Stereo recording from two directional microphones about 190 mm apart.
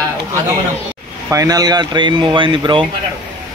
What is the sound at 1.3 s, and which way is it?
Speech, 20° right (ahead or behind).